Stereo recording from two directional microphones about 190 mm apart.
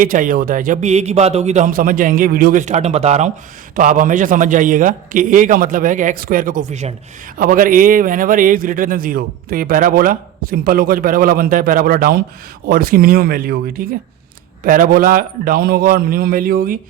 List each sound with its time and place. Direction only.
0.0 s a man's voice: 45° right (ahead or behind)